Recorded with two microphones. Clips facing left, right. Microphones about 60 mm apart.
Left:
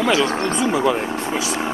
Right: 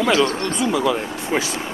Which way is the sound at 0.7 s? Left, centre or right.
Left.